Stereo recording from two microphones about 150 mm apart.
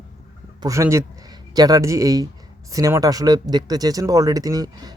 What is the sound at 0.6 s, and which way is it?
Speech, 20° right (ahead or behind).